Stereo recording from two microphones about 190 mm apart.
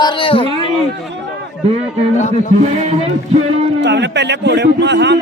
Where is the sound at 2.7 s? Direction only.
35° right (ahead or behind).